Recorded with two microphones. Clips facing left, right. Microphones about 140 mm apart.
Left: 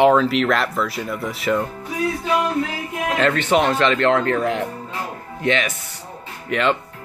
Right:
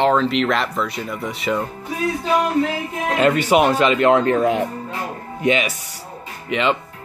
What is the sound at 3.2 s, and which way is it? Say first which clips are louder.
Speech: right 3 dB; 10° right (ahead or behind).